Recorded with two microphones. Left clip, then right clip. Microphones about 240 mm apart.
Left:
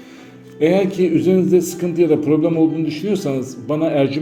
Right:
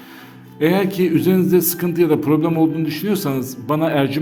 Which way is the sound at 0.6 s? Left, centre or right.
Right.